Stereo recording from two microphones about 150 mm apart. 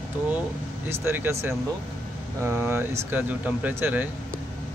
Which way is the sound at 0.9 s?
15° right (ahead or behind).